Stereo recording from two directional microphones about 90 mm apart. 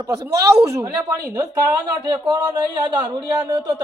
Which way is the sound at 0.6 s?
35° right (ahead or behind).